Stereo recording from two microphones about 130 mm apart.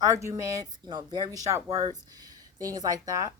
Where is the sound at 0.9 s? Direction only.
35° right (ahead or behind).